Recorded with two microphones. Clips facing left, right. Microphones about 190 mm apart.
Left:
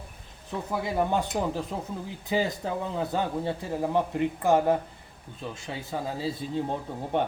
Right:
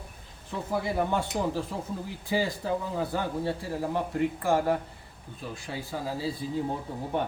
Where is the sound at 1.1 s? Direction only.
20° left (ahead or behind).